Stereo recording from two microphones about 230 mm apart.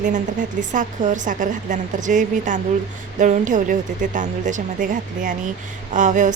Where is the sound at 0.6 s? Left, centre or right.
Right.